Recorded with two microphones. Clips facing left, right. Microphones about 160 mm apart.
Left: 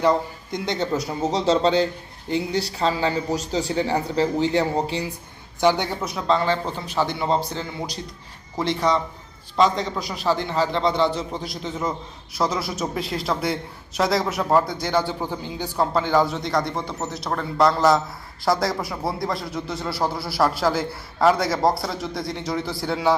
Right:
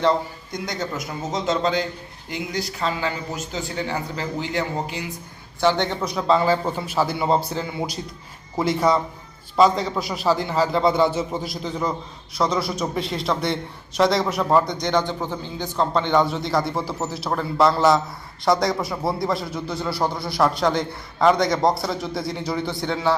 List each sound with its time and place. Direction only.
0.5 s speech: 25° left (ahead or behind)
5.5 s a man's voice: 15° left (ahead or behind); by 9.0 s 5° right (ahead or behind)
10.2 s a man's voice: 5° right (ahead or behind)